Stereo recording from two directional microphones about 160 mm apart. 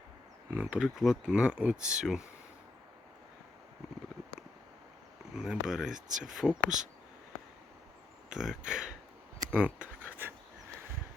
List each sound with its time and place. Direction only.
0.5 s speech: 5° right (ahead or behind)
5.3 s speech: 5° right (ahead or behind)
5.9 s speech: 50° right (ahead or behind)
6.2 s speech: 5° right (ahead or behind)
8.3 s speech: 5° right (ahead or behind)
9.5 s writing: 10° right (ahead or behind)